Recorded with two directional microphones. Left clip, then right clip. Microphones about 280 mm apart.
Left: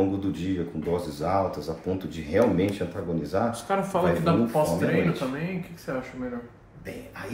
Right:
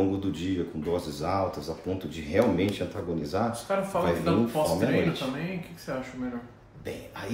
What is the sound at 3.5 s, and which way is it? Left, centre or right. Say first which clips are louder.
Speech: left 2 dB; centre.